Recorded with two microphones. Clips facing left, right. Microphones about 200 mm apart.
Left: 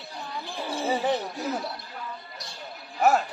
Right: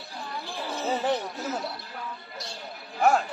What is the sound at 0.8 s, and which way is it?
Basketball bounce, 10° left (ahead or behind).